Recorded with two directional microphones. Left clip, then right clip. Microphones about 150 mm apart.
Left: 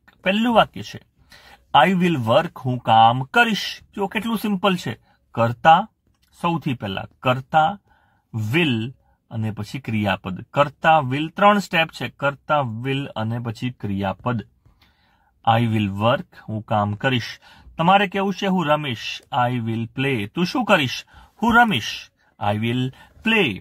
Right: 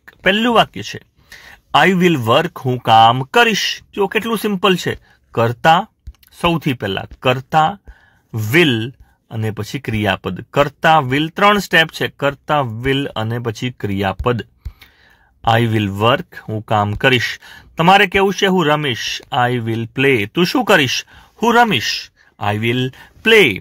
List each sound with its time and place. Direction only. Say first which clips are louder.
0.0 s speech: right 7 dB; 20° right (ahead or behind)
3.3 s speech: right 5 dB; 15° right (ahead or behind)
15.4 s speech: right 4 dB; 25° right (ahead or behind)
23.2 s speech: right 9 dB; 30° right (ahead or behind)